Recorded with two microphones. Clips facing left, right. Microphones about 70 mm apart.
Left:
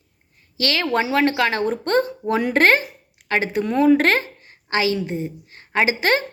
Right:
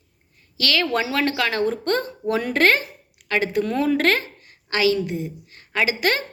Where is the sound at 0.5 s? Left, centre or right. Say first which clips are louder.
Left 1 dB; left.